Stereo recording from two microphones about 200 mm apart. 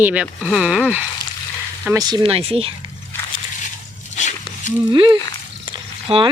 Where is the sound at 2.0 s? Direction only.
20° right (ahead or behind).